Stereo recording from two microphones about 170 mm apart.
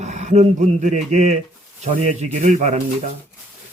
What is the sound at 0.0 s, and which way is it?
Speech, 45° right (ahead or behind).